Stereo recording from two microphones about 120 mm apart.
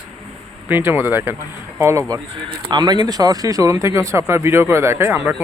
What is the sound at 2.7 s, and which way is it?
Speech, 35° right (ahead or behind).